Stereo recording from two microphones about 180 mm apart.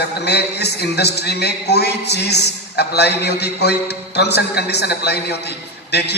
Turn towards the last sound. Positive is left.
turn(degrees=65)  # may be behind; listen again after turning